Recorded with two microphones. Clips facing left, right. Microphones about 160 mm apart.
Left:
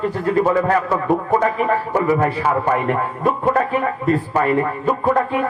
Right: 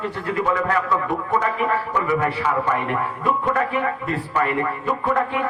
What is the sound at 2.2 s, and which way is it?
A man's voice, 35° left (ahead or behind).